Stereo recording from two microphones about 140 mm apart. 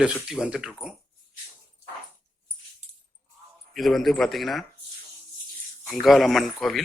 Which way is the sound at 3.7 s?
Centre (ahead or behind).